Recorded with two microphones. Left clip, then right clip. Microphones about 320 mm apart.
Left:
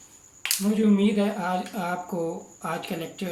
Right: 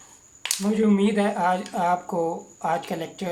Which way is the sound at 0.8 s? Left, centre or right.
Right.